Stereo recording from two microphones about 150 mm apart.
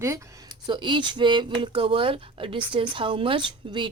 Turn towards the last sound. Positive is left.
turn(degrees=-35)  # may be behind; listen again after turning